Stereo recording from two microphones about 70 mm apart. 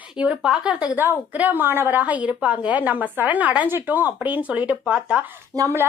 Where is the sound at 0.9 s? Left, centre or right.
Right.